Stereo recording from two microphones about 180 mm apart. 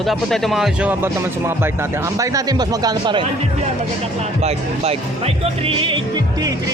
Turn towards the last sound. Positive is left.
turn(degrees=-25)  # may be behind; listen again after turning